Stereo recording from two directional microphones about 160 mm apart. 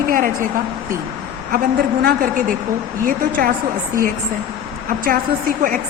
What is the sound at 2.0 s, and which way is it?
Speech, 75° right (ahead or behind).